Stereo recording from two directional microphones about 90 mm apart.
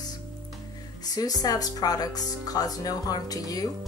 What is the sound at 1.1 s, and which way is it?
Speech, 45° left (ahead or behind).